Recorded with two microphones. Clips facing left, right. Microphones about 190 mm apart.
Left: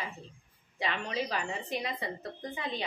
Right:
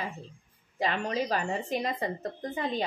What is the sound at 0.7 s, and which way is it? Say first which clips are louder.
A woman's voice: right 4 dB; 45° right (ahead or behind).